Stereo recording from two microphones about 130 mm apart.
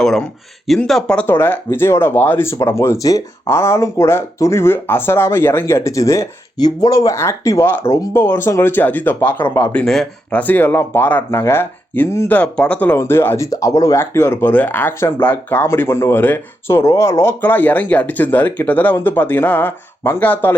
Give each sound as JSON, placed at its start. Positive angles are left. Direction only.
{"t": 0.0, "sound": "speech", "side_deg": 5}